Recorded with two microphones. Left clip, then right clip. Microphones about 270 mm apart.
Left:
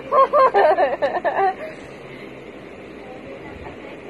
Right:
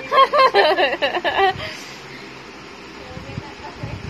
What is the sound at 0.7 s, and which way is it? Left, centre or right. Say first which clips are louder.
Speech: even; right.